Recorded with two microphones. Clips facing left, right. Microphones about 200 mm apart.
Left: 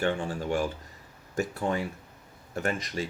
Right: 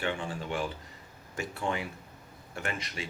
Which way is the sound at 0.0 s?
40° left (ahead or behind).